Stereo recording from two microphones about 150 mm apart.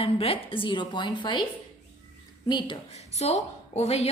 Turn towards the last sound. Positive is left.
turn(degrees=45)  # may be behind; listen again after turning